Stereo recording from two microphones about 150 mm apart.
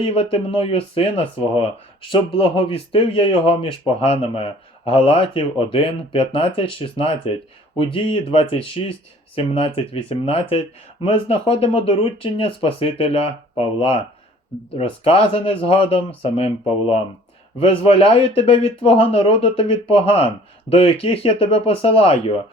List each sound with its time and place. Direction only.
0.0 s speech: 45° left (ahead or behind)